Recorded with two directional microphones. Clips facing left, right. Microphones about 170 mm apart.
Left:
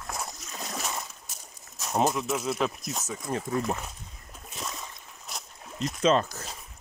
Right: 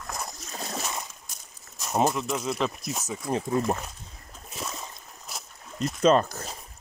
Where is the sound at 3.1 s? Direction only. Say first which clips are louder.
Right 4 dB; 20° right (ahead or behind).